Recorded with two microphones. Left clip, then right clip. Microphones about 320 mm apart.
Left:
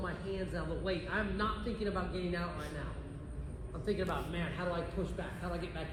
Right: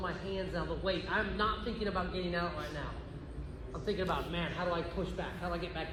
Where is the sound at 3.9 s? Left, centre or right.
Centre.